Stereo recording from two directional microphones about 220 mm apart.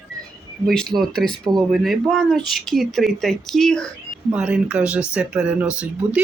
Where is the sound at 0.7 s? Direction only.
Centre (ahead or behind).